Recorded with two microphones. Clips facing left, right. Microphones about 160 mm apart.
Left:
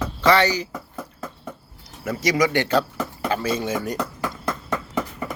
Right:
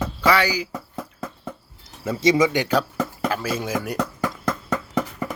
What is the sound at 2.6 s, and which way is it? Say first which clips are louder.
Speech: even; 10° right (ahead or behind).